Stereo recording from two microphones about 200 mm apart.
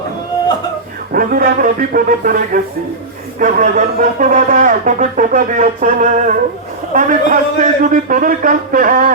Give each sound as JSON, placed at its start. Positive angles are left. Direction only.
{"t": 1.1, "sound": "a man's voice", "side_deg": -45}